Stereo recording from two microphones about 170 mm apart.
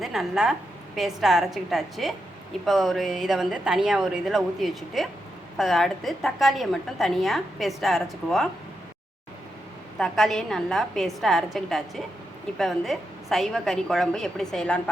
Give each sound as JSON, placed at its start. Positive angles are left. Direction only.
{"t": 0.0, "sound": "a woman's voice", "side_deg": 0}
{"t": 10.0, "sound": "a woman's voice", "side_deg": 0}